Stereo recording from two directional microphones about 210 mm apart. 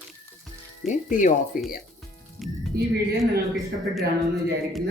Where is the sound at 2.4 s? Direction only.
Centre (ahead or behind).